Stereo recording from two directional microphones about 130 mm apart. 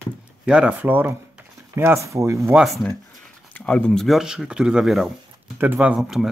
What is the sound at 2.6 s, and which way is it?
Speech, centre (ahead or behind).